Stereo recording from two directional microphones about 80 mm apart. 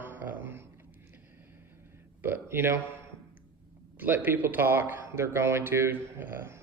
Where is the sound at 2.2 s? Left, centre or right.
Right.